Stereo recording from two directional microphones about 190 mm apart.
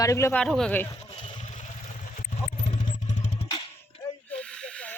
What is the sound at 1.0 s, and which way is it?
Vehicle, 30° left (ahead or behind).